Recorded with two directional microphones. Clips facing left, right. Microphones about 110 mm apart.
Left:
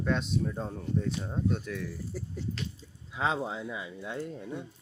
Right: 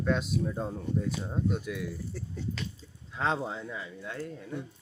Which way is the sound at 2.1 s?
10° left (ahead or behind).